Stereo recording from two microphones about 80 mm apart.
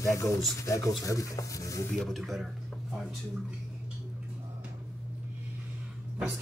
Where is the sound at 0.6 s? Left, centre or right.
Left.